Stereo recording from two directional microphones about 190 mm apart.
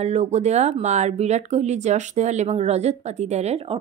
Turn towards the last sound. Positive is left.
turn(degrees=-35)  # may be behind; listen again after turning